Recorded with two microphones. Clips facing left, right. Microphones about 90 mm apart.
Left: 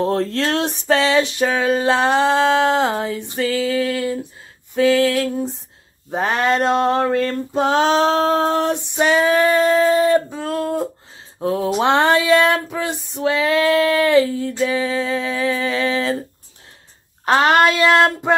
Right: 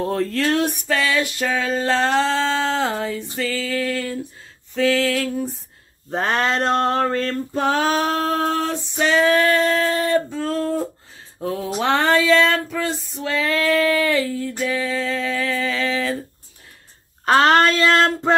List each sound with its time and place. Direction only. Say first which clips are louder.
0.6 s female singing: left 3 dB; 25° left (ahead or behind)
6.0 s female singing: left 2 dB; 5° left (ahead or behind)
9.2 s a sound: even; 5° left (ahead or behind)
11.3 s a sound: left 5 dB; 30° left (ahead or behind)
11.8 s female singing: left 1 dB; 20° left (ahead or behind)
17.2 s child singing: left 1 dB; 10° left (ahead or behind)